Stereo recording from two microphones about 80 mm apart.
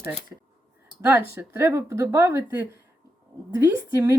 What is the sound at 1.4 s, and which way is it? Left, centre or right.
Speech, right.